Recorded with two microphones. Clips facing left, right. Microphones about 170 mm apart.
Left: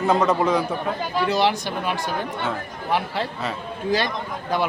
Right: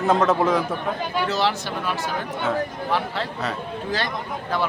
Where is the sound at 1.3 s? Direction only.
15° left (ahead or behind).